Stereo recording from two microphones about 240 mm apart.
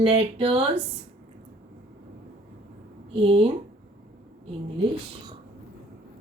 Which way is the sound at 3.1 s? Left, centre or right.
Right.